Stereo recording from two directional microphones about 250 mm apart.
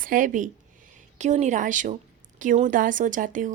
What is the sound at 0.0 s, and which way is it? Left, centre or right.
A woman's voice, right.